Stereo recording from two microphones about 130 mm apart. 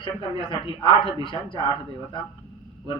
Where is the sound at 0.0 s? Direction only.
40° left (ahead or behind).